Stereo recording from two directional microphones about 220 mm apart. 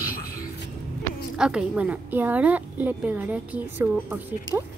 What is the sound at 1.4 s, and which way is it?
A woman's voice, 5° right (ahead or behind).